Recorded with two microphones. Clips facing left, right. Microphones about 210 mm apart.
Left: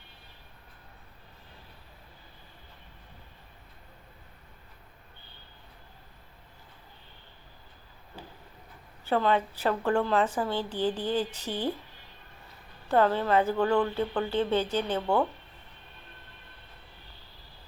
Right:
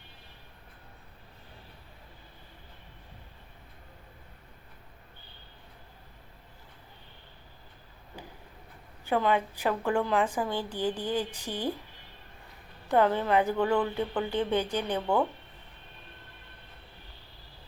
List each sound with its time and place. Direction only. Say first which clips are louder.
9.0 s a woman's voice: left 1 dB; 15° right (ahead or behind)
12.9 s a woman's voice: even; 15° right (ahead or behind)